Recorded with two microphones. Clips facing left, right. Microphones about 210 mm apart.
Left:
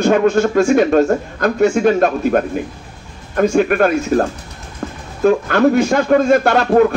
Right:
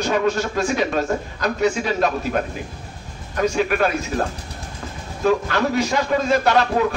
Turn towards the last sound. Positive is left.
turn(degrees=50)  # may be behind; listen again after turning